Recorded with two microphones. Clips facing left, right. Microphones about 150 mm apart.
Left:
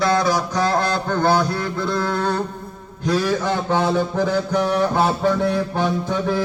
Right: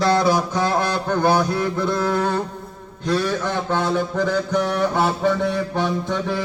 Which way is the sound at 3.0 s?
5° left (ahead or behind).